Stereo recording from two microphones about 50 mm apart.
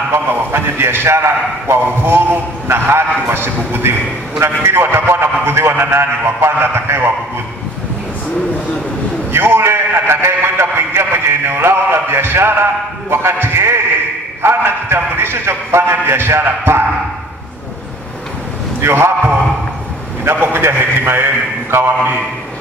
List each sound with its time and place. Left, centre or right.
0.3 s a man's voice: right
9.3 s a man's voice: right
18.8 s a man's voice: right
20.2 s a man's voice: right